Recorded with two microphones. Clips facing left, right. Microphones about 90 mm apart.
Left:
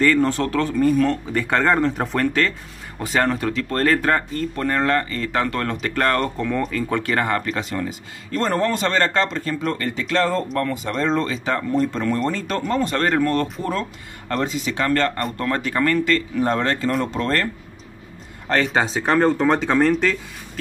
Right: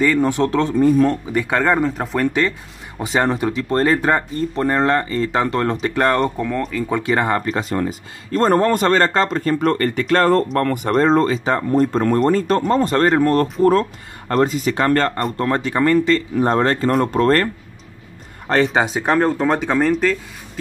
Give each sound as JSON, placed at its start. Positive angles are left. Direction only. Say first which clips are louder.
{"t": 0.0, "sound": "speech", "louder": "right 2 dB", "side_deg": -10}
{"t": 3.0, "sound": "speech", "louder": "right 2 dB", "side_deg": -20}
{"t": 6.9, "sound": "speech", "louder": "right 5 dB", "side_deg": -15}
{"t": 11.0, "sound": "speech", "louder": "right 7 dB", "side_deg": -40}
{"t": 16.3, "sound": "speech", "louder": "right 4 dB", "side_deg": -35}
{"t": 18.7, "sound": "speech", "louder": "right 2 dB", "side_deg": -10}